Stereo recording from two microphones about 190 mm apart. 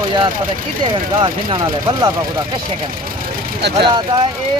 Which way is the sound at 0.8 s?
25° right (ahead or behind).